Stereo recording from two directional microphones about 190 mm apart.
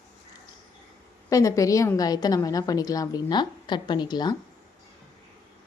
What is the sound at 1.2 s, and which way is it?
A woman's voice, 15° left (ahead or behind).